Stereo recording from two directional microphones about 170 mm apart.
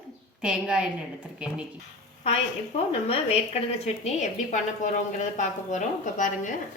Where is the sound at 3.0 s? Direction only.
35° left (ahead or behind).